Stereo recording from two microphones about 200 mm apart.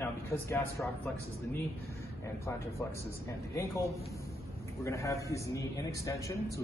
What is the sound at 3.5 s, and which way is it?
Speech, 15° left (ahead or behind).